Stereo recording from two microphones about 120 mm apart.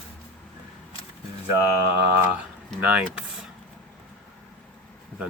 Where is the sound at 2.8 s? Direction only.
10° right (ahead or behind).